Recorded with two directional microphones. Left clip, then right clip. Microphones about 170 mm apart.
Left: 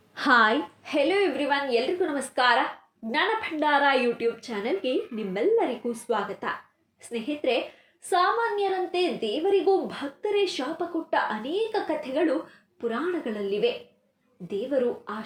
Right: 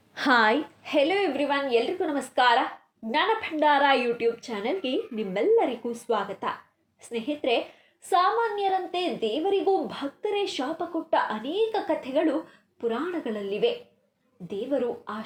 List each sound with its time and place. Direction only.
0.1 s a woman's voice: 30° right (ahead or behind)